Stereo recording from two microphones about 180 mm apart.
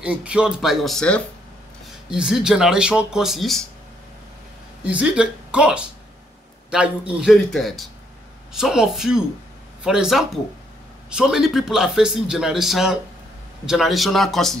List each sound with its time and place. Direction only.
0.0 s a man's voice: 5° right (ahead or behind)
4.8 s a man's voice: 5° right (ahead or behind)